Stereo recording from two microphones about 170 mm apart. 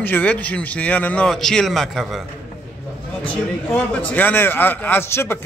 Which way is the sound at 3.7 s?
10° left (ahead or behind).